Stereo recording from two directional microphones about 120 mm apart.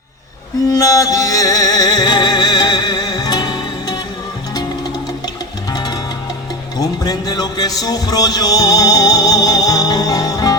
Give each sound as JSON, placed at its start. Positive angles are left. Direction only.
{"t": 0.7, "sound": "music", "side_deg": 30}
{"t": 5.7, "sound": "music", "side_deg": 35}